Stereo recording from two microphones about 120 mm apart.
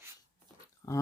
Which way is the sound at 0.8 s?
30° left (ahead or behind).